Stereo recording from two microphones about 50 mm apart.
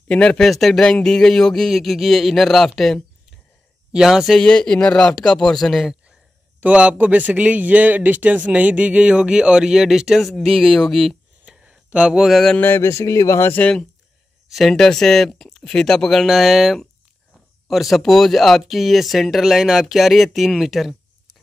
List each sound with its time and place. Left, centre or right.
0.1 s speech: left
0.4 s speech: centre
0.8 s speech: centre
3.9 s speech: centre
4.4 s speech: centre
6.6 s a man's voice: right; by 11.1 s centre
11.9 s speech: centre
12.8 s speech: left
13.6 s speech: left
14.7 s speech: centre
16.3 s speech: centre